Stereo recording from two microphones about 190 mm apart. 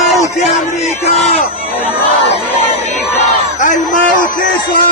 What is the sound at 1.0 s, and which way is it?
Speech, 35° left (ahead or behind).